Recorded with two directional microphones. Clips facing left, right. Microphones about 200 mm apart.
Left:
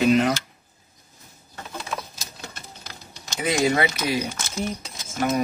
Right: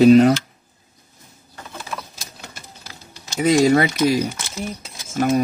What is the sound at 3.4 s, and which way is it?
Speech, 40° right (ahead or behind).